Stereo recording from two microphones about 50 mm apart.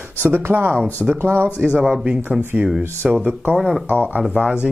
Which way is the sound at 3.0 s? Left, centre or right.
Centre.